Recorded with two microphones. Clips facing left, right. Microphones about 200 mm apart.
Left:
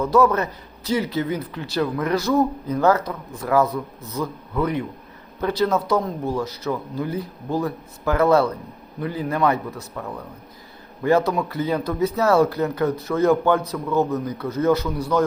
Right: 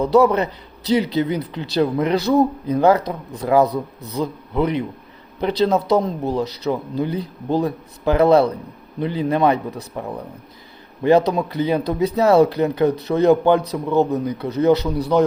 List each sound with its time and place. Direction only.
0.2 s speech: 15° right (ahead or behind)
3.7 s speech: 35° right (ahead or behind)
4.5 s speech: 20° right (ahead or behind)